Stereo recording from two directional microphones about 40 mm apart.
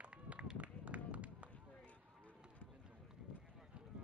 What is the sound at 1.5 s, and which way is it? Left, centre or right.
Clip-clop, left.